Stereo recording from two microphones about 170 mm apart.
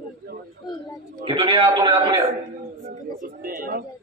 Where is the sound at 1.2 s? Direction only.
30° right (ahead or behind).